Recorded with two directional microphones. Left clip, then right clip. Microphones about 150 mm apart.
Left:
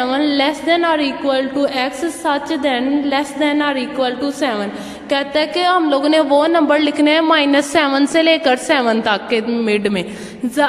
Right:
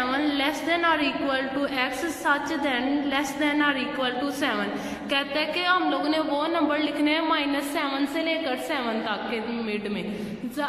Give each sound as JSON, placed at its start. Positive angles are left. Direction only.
{"t": 0.0, "sound": "a woman's voice", "side_deg": 35}
{"t": 5.1, "sound": "a woman's voice", "side_deg": 40}